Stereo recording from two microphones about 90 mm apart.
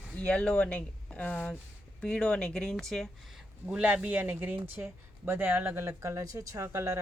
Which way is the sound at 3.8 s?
15° right (ahead or behind).